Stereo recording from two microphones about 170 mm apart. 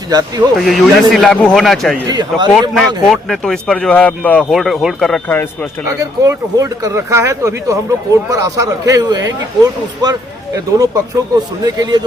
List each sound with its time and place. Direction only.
0.1 s speech: 20° right (ahead or behind)
0.6 s speech: centre (ahead or behind)
2.0 s speech: 25° right (ahead or behind)
2.5 s speech: centre (ahead or behind)
6.0 s speech: 20° right (ahead or behind)